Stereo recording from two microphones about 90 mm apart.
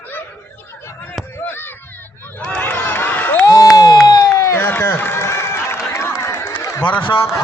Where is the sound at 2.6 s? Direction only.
25° left (ahead or behind).